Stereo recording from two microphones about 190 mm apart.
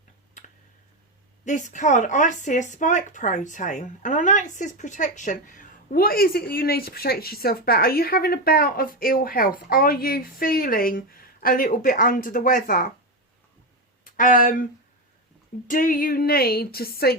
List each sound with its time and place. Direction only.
1.5 s speech: 40° left (ahead or behind)
14.0 s a sound: 45° left (ahead or behind)
15.6 s speech: 45° left (ahead or behind)